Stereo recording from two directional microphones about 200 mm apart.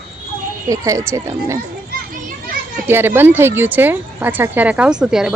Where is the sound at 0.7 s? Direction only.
15° right (ahead or behind).